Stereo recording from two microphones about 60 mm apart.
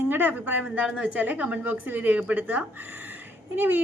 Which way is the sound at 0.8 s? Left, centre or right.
Centre.